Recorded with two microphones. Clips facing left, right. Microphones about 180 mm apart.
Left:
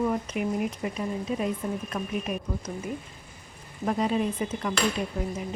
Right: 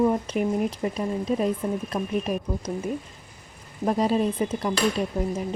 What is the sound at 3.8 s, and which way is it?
Speech, 35° right (ahead or behind).